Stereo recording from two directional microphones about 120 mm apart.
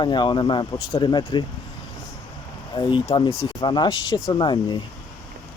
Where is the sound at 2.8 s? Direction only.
45° left (ahead or behind).